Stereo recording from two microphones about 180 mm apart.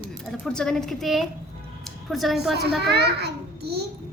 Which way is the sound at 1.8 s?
Centre (ahead or behind).